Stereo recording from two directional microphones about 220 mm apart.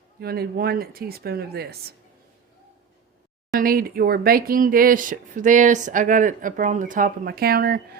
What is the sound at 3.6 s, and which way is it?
Speech, 40° right (ahead or behind).